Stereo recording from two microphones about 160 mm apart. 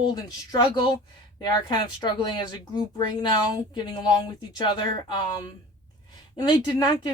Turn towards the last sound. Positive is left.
turn(degrees=25)  # may be behind; listen again after turning